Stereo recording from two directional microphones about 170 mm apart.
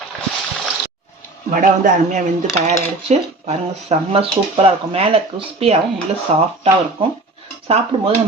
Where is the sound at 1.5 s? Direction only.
50° right (ahead or behind).